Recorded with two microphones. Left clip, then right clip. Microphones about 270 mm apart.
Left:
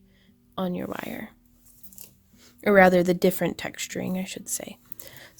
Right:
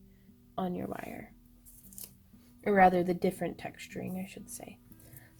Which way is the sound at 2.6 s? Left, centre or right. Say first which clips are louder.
Left 7 dB; left.